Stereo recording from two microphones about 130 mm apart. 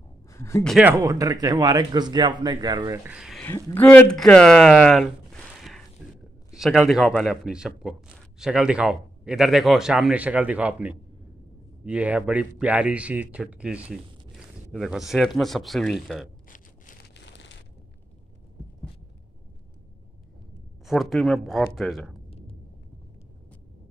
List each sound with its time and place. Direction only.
0.3 s speech: 25° left (ahead or behind)
0.8 s a man's voice: 25° right (ahead or behind)
3.1 s a man's voice: 5° right (ahead or behind)
3.7 s a man's voice: 15° left (ahead or behind)
16.4 s a sound: 85° left
20.8 s speech: centre (ahead or behind)